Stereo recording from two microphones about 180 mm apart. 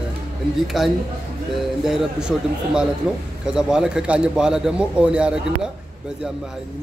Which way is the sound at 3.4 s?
5° right (ahead or behind).